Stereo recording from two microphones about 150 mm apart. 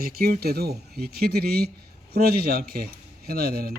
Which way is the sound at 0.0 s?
85° right.